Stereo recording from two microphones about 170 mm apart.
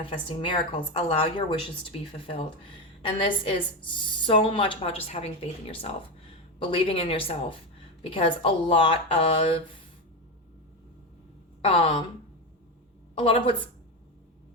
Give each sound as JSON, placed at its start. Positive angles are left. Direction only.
{"t": 0.0, "sound": "a woman's voice", "side_deg": 30}
{"t": 11.6, "sound": "a woman's voice", "side_deg": 30}
{"t": 13.1, "sound": "a woman's voice", "side_deg": 30}